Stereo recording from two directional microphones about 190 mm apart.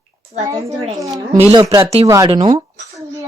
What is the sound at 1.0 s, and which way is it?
Speech, 15° right (ahead or behind).